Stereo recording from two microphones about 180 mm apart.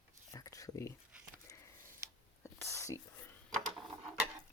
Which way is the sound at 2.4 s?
15° left (ahead or behind).